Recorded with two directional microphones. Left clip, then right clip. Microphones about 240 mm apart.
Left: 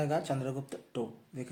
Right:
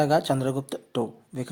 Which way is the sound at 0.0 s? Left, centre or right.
Right.